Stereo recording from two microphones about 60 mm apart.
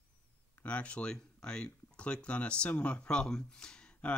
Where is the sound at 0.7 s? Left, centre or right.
Left.